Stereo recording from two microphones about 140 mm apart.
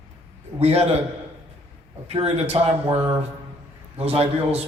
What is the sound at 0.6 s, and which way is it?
Speech, 45° right (ahead or behind).